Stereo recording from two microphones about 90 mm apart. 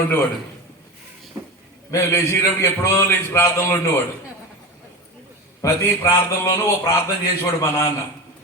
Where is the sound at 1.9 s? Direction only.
30° left (ahead or behind).